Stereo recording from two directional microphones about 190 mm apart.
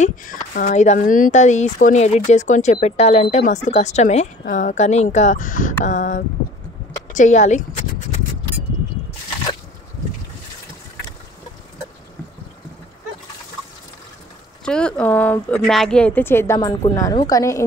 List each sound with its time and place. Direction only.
0.0 s speech: 45° left (ahead or behind)
14.6 s speech: 5° left (ahead or behind)